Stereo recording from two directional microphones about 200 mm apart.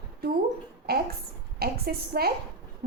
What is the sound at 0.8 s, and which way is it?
A woman's voice, 55° right (ahead or behind).